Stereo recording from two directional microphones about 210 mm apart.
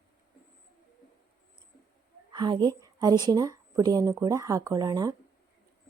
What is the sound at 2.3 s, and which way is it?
A woman's voice, 20° right (ahead or behind).